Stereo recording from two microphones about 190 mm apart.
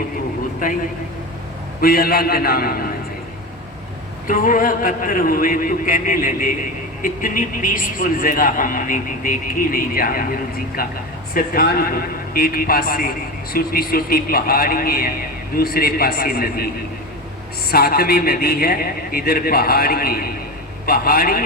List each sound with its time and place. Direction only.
0.6 s a man's voice: 45° left (ahead or behind)
1.8 s a man's voice: 50° left (ahead or behind)
4.3 s a man's voice: 45° left (ahead or behind)
17.7 s a man's voice: 55° left (ahead or behind)